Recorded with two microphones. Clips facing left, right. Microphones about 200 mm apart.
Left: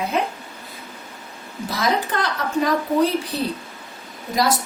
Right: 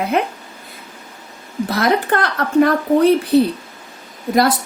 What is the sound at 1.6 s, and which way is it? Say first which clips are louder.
A woman's voice: right 5 dB; 60° right (ahead or behind).